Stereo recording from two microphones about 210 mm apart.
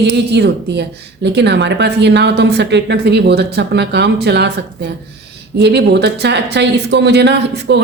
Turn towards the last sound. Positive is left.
turn(degrees=-55)  # may be behind; listen again after turning